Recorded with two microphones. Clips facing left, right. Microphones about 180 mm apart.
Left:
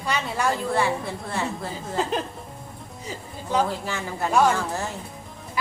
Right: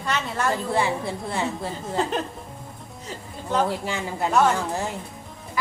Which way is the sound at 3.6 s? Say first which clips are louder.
Right 2 dB; 15° right (ahead or behind).